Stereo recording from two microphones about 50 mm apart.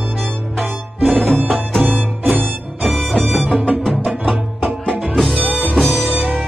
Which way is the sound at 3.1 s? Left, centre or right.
Right.